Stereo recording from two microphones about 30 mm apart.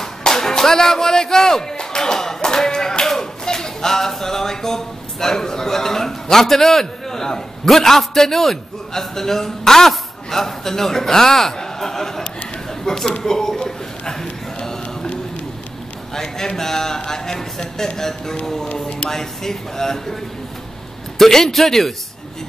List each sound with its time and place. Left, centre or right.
0.3 s speech: centre
3.2 s a sound: centre
7.6 s a man's voice: centre
14.2 s a sound: left
16.2 s a man's voice: centre
21.2 s a man's voice: centre